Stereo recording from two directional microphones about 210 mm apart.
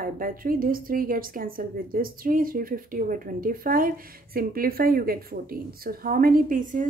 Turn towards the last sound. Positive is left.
turn(degrees=-40)  # may be behind; listen again after turning